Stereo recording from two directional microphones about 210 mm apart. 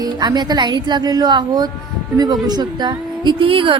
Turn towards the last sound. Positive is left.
turn(degrees=-25)  # may be behind; listen again after turning